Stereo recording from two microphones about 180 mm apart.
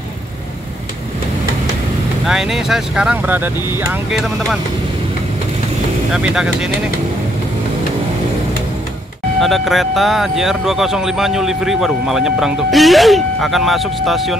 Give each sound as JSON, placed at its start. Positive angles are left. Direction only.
{"t": 2.2, "sound": "speech", "side_deg": 0}
{"t": 4.1, "sound": "speech", "side_deg": 0}
{"t": 6.1, "sound": "speech", "side_deg": -5}
{"t": 9.4, "sound": "speech", "side_deg": 0}